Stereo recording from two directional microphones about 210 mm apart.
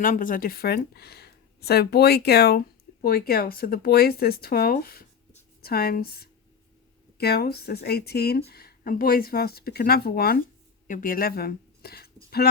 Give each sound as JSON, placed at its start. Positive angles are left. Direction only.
{"t": 0.0, "sound": "a woman's voice", "side_deg": 40}